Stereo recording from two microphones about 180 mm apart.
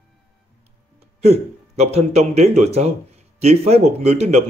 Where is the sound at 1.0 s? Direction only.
35° right (ahead or behind).